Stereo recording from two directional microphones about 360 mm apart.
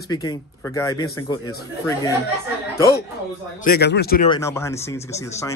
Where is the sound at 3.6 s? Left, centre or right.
Left.